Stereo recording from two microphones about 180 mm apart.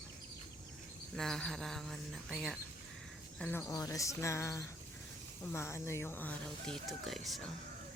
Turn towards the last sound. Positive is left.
turn(degrees=0)  # may be behind; listen again after turning